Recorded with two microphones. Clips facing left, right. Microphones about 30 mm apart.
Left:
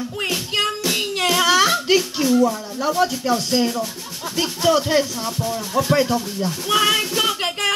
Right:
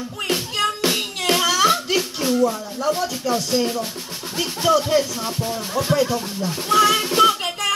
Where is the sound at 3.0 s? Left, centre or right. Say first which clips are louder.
Left 3 dB; left.